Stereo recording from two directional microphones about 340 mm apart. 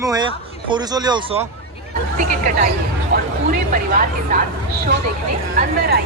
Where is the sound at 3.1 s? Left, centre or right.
Right.